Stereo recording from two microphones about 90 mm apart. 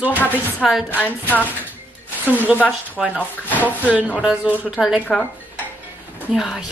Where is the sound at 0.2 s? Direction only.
20° left (ahead or behind).